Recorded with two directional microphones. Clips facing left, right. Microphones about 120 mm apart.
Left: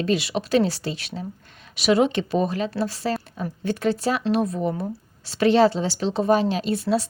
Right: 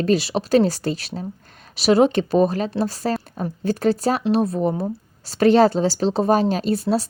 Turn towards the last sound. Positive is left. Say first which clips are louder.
# right 2 dB
turn(degrees=-40)  # may be behind; listen again after turning